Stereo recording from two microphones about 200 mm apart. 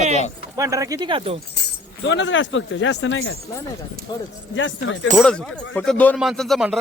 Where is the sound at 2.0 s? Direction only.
65° left (ahead or behind).